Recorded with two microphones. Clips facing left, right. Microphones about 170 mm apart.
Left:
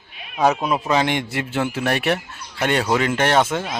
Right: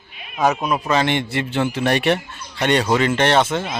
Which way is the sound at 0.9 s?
10° left (ahead or behind).